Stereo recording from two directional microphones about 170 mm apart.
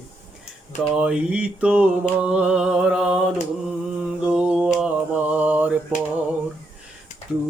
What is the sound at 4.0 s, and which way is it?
Mantra, 5° right (ahead or behind).